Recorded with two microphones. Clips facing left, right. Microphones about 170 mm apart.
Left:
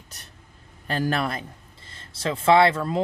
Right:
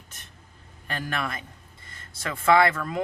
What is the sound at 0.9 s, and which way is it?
Speech, 35° left (ahead or behind).